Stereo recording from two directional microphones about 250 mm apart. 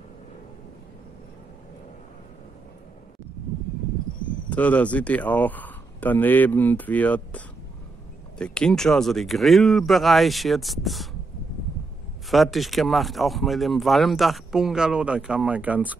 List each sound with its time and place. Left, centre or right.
4.5 s speech: centre
12.3 s speech: centre